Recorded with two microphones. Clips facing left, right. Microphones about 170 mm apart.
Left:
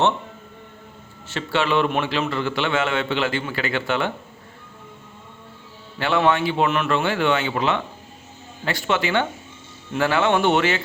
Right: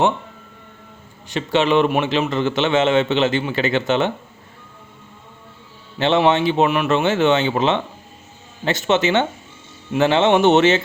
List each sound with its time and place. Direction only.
1.3 s a man's voice: 20° right (ahead or behind)
6.0 s a man's voice: 25° right (ahead or behind)